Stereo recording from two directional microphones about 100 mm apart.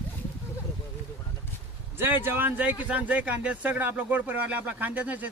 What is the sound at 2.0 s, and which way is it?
Speech, 20° right (ahead or behind).